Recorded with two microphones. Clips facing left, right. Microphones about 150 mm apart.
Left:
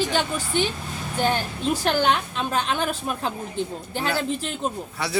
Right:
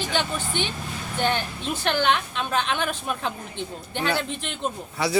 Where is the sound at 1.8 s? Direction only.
40° left (ahead or behind).